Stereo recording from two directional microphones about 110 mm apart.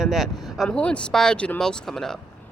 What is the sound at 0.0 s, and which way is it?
Speech, centre (ahead or behind).